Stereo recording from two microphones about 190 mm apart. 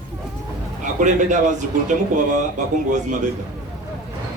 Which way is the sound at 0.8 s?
40° right (ahead or behind).